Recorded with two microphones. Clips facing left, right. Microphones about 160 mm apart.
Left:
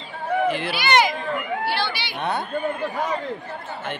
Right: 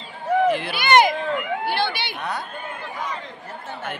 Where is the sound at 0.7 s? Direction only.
50° right (ahead or behind).